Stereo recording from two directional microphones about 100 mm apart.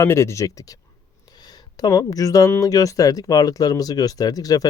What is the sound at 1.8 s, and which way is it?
Speech, 40° left (ahead or behind).